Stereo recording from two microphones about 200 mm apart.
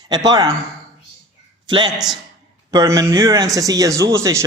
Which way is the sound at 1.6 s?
20° right (ahead or behind).